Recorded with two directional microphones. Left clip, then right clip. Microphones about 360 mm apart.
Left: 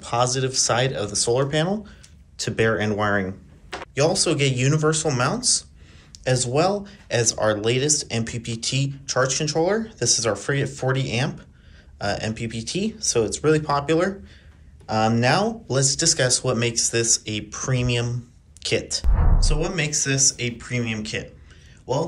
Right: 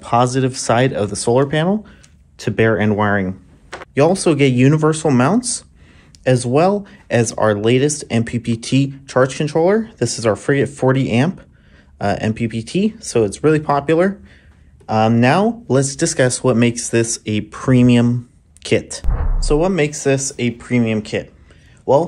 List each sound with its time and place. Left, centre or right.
0.0 s speech: centre